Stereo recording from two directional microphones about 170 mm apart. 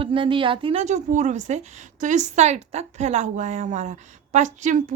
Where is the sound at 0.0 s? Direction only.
30° right (ahead or behind).